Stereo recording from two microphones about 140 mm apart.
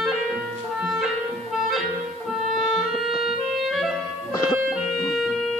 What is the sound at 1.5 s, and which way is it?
Clarinet, centre (ahead or behind).